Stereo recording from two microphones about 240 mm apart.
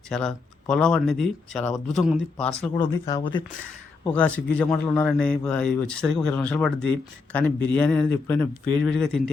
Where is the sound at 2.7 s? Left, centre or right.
Centre.